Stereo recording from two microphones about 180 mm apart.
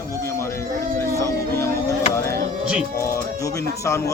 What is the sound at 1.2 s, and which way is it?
Music, 15° left (ahead or behind).